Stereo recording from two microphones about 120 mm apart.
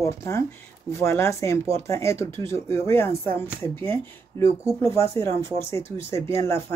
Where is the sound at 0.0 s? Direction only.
25° left (ahead or behind).